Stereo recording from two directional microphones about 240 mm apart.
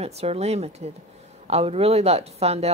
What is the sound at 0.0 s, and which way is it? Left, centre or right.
A woman's voice, right.